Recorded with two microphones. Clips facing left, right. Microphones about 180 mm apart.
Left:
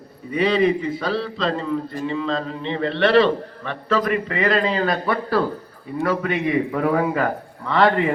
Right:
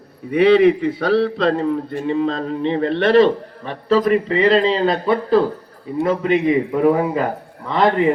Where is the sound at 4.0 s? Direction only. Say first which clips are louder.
Right 7 dB; 30° right (ahead or behind).